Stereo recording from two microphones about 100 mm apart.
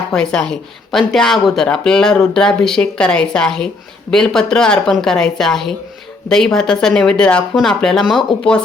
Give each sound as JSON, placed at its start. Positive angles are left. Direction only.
{"t": 0.1, "sound": "a woman's voice", "side_deg": 5}